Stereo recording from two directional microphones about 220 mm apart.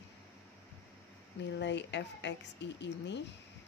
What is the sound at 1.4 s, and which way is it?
A woman's voice, 55° left (ahead or behind).